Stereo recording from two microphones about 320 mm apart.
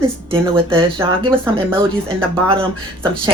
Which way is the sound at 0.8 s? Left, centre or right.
Centre.